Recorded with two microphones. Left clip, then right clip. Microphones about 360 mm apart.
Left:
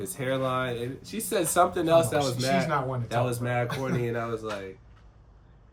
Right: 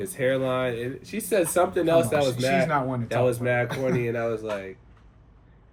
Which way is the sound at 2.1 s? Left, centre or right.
Centre.